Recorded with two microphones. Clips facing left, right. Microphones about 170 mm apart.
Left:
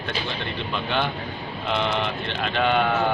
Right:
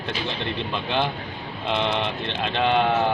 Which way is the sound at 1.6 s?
20° right (ahead or behind).